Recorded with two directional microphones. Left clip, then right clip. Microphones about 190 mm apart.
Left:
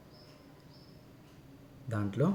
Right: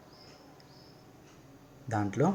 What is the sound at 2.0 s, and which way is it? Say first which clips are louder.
Speech: right 4 dB; 10° left (ahead or behind).